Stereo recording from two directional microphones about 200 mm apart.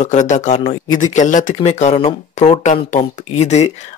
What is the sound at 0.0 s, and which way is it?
Speech, 35° left (ahead or behind).